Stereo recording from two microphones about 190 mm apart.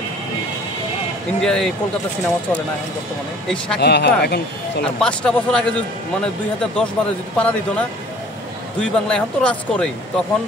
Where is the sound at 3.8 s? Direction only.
60° left (ahead or behind).